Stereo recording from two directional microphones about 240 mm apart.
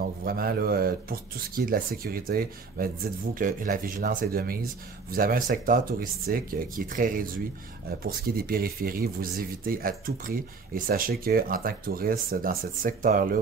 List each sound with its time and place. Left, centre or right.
0.2 s speech: right